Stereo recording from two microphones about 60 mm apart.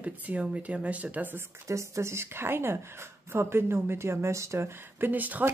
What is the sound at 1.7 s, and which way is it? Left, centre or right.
Speech, right.